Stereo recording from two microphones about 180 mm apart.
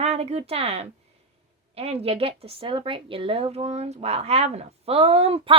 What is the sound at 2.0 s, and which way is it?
Speech, 35° right (ahead or behind).